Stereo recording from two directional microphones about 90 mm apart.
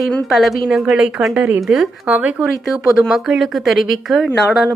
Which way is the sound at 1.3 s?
15° right (ahead or behind).